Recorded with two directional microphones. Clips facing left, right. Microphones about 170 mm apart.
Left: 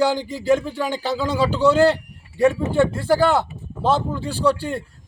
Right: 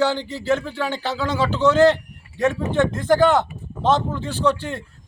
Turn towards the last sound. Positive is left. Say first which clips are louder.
# left 1 dB
turn(degrees=10)  # may be behind; listen again after turning